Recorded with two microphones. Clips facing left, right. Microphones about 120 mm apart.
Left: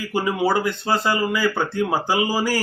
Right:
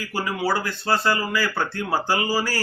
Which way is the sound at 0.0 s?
20° left (ahead or behind).